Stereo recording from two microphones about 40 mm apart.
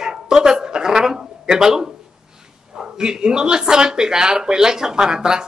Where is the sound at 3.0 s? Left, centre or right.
Centre.